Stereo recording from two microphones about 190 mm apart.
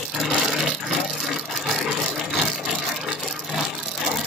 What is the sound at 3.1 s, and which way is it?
Vehicle, centre (ahead or behind).